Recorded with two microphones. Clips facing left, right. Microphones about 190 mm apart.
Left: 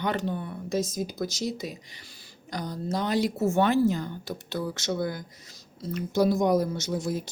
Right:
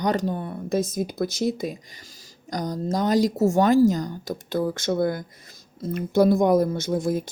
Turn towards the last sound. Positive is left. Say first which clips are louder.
# right 5 dB
turn(degrees=-55)  # may be behind; listen again after turning